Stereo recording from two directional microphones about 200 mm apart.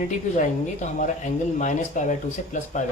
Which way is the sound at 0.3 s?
40° left (ahead or behind).